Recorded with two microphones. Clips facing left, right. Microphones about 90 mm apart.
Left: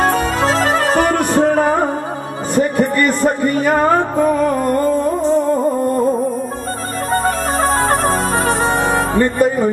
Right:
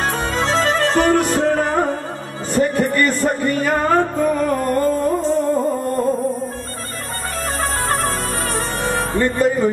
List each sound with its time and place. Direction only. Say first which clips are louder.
0.7 s music: left 1 dB; 10° left (ahead or behind)
2.5 s a sound: left 2 dB; 10° left (ahead or behind)
3.3 s music: left 3 dB; 10° left (ahead or behind)
7.8 s music: left 6 dB; 20° left (ahead or behind)